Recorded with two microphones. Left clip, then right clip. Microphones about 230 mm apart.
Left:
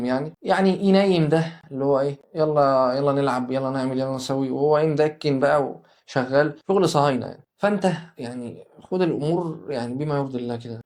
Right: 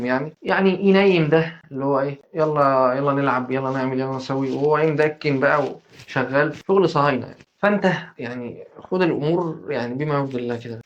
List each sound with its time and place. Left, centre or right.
0.0 s speech: left
7.6 s speech: left